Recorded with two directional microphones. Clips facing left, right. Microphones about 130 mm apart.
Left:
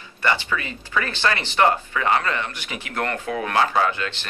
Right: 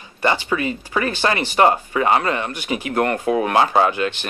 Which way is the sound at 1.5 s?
30° right (ahead or behind).